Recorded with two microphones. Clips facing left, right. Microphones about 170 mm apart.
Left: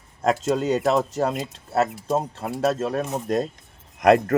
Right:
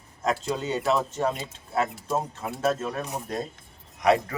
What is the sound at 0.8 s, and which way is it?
Speech, 40° left (ahead or behind).